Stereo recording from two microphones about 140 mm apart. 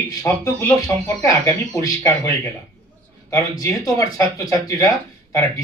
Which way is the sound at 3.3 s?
25° left (ahead or behind).